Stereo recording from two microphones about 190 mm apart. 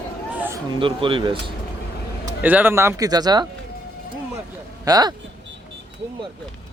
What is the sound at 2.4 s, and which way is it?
Speech, 10° right (ahead or behind).